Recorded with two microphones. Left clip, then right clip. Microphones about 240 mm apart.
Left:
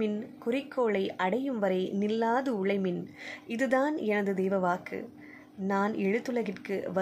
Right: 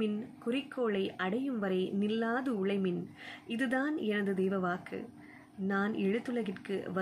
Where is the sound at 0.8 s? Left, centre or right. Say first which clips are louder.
Left 4 dB; centre.